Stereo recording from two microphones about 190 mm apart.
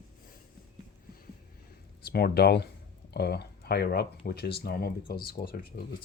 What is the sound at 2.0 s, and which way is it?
Speech, 55° left (ahead or behind).